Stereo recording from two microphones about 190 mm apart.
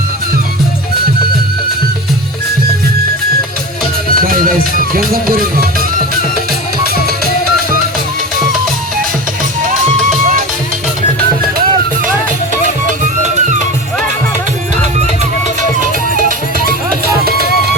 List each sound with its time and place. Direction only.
4.1 s music: 50° right (ahead or behind)
4.8 s speech: 50° right (ahead or behind)
16.6 s music: 50° right (ahead or behind)